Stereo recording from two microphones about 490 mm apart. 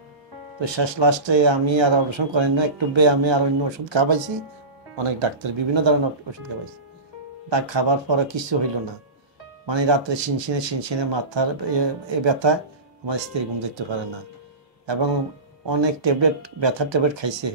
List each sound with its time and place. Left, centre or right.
0.6 s speech: right
4.9 s speech: right
9.7 s speech: right
15.7 s speech: right